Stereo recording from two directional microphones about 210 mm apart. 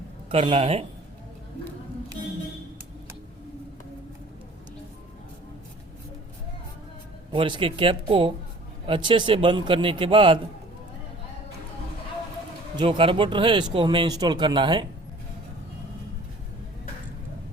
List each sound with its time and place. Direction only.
0.3 s speech: 25° right (ahead or behind)
7.3 s speech: 25° right (ahead or behind)
12.7 s speech: 25° right (ahead or behind)